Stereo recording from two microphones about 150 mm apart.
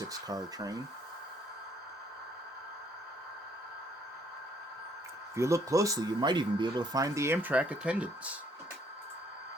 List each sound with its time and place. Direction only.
0.0 s speech: 25° right (ahead or behind)
5.3 s speech: 20° right (ahead or behind)